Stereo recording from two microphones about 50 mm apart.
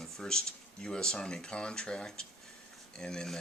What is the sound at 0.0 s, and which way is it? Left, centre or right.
Speech, centre.